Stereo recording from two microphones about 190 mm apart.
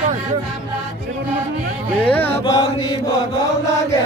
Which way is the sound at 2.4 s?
25° left (ahead or behind).